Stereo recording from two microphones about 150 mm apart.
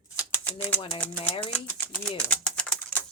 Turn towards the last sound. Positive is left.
turn(degrees=10)  # may be behind; listen again after turning